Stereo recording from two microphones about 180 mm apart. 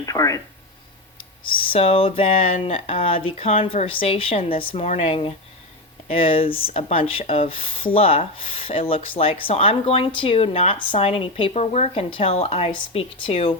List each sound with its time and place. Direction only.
0.0 s speech: 20° left (ahead or behind)
1.7 s speech: 30° left (ahead or behind)